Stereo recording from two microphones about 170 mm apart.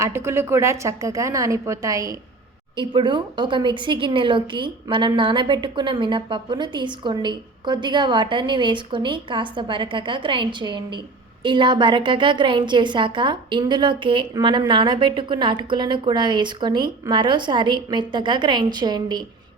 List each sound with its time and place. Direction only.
0.0 s a woman's voice: 15° right (ahead or behind)